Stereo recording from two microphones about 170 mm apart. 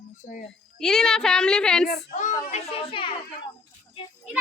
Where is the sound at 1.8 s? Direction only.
45° left (ahead or behind).